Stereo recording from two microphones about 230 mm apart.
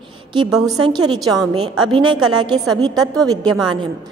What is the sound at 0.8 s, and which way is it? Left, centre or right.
Speech, centre.